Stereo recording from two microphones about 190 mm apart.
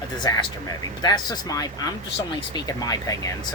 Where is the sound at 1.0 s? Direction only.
20° left (ahead or behind).